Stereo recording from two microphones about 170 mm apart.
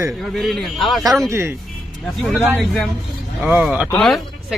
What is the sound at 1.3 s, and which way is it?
Speech, 15° right (ahead or behind).